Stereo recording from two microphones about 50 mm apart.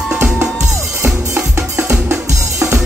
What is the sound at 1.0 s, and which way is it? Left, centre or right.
Music, right.